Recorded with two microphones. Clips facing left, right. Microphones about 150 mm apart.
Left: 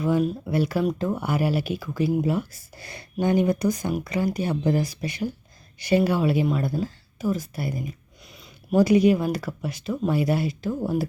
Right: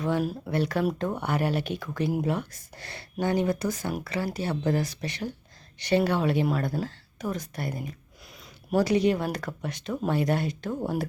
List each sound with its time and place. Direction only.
0.0 s speech: 5° left (ahead or behind)
8.7 s speech: 10° left (ahead or behind)